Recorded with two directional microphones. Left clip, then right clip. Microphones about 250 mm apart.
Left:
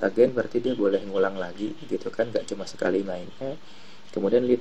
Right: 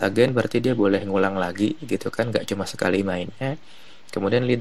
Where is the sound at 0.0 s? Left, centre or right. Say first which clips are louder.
Right 1 dB; right.